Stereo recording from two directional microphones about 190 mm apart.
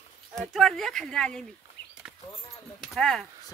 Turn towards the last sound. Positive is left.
turn(degrees=0)  # may be behind; listen again after turning